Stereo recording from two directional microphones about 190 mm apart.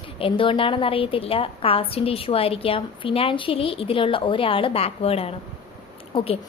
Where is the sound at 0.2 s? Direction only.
30° left (ahead or behind).